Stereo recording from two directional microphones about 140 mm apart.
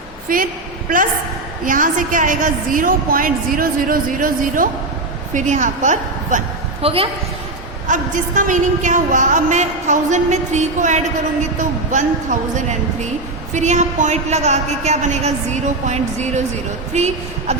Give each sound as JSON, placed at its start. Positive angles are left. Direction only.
{"t": 0.3, "sound": "a woman's voice", "side_deg": -90}
{"t": 1.6, "sound": "a woman's voice", "side_deg": -70}
{"t": 5.3, "sound": "a woman's voice", "side_deg": -65}
{"t": 6.8, "sound": "a woman's voice", "side_deg": -45}
{"t": 7.9, "sound": "a woman's voice", "side_deg": -65}